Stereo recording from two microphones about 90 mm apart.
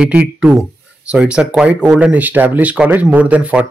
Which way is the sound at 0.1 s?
15° right (ahead or behind).